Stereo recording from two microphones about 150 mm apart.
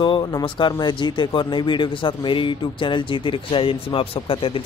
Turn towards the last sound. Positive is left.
turn(degrees=40)  # may be behind; listen again after turning